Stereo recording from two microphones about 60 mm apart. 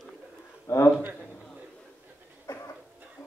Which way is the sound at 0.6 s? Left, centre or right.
Left.